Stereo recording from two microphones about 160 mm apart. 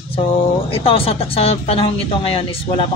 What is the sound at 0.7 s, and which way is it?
Speech, 35° left (ahead or behind).